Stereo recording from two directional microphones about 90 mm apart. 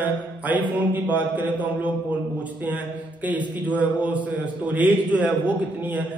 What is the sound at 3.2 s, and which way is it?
Speech, 15° right (ahead or behind).